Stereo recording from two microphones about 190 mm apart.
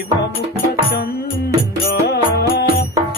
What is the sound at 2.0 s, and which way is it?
Music, 60° left (ahead or behind).